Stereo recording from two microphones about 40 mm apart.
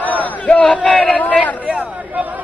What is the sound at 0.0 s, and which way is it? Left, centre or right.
Battle cry, left.